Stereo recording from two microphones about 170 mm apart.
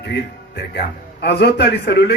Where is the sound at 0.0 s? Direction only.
85° left.